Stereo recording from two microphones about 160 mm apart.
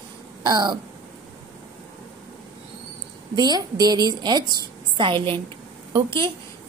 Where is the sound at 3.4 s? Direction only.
25° right (ahead or behind).